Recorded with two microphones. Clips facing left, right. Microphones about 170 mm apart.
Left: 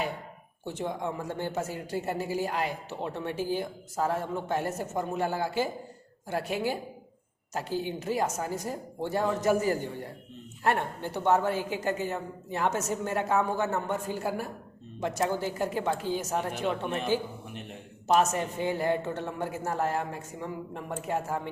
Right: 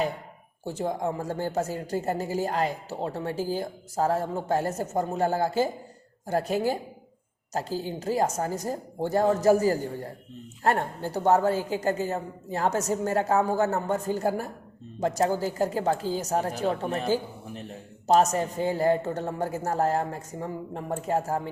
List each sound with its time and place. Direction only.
0.6 s speech: 40° right (ahead or behind)